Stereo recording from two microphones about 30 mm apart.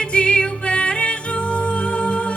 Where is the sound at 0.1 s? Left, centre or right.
Left.